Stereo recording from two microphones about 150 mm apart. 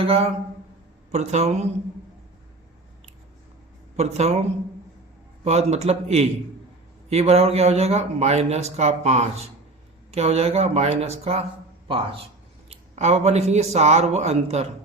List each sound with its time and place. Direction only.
0.0 s a man's voice: 40° right (ahead or behind)
3.9 s a man's voice: 45° right (ahead or behind)
5.5 s a man's voice: 45° right (ahead or behind)
12.6 s a man's voice: 45° right (ahead or behind)